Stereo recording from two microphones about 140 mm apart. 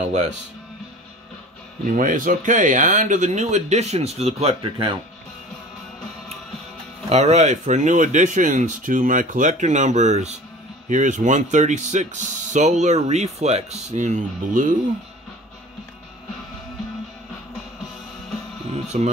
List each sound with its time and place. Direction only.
2.0 s speech: 70° right (ahead or behind); by 4.9 s 40° right (ahead or behind)
7.1 s speech: 50° right (ahead or behind); by 14.7 s 70° right (ahead or behind)
18.7 s a sound: 50° right (ahead or behind)